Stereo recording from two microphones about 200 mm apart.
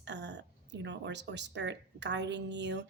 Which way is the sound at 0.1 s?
60° right (ahead or behind).